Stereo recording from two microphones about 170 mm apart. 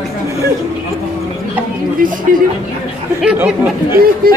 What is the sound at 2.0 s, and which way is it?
Speech, 55° right (ahead or behind).